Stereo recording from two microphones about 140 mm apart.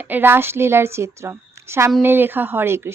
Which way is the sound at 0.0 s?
15° right (ahead or behind).